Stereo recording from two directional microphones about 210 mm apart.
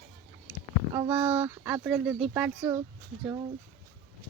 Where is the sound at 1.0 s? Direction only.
10° right (ahead or behind).